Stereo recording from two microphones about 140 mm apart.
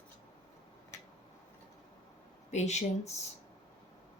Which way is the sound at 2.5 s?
55° left (ahead or behind).